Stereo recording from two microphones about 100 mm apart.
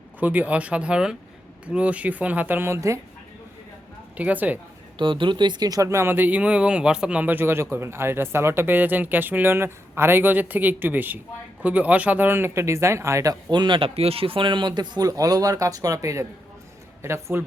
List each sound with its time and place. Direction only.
0.2 s speech: 15° right (ahead or behind)
4.2 s speech: 15° right (ahead or behind)
4.9 s speech: 55° right (ahead or behind); by 13.3 s 30° right (ahead or behind)
13.5 s speech: 50° right (ahead or behind); by 17.4 s 25° right (ahead or behind)